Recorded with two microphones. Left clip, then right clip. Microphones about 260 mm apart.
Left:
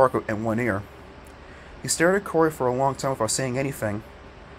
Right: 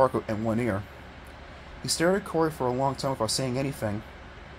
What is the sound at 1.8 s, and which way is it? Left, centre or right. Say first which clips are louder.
Speech: left 4 dB; centre.